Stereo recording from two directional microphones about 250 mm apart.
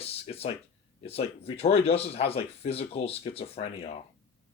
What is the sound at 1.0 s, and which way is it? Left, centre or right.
Speech, left.